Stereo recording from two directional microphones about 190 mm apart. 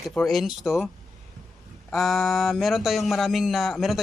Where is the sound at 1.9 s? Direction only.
Centre (ahead or behind).